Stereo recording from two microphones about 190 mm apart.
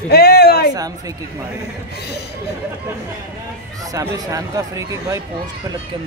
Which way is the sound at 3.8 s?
15° right (ahead or behind).